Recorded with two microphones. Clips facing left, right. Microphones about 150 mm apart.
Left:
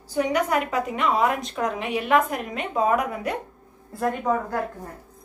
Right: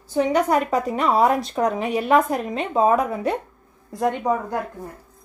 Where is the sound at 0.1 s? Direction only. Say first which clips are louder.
Right 4 dB; 30° right (ahead or behind).